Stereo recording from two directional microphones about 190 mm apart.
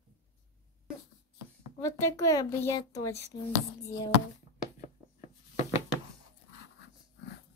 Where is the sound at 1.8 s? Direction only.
15° left (ahead or behind).